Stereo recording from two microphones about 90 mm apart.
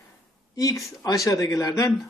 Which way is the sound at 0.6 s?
40° left (ahead or behind).